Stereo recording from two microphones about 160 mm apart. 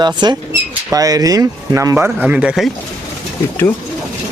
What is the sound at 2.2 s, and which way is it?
Speech, 5° right (ahead or behind).